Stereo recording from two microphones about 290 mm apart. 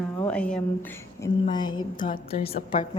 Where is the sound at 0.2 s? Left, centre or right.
Centre.